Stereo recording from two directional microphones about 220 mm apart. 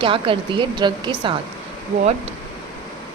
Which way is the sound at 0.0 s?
25° right (ahead or behind).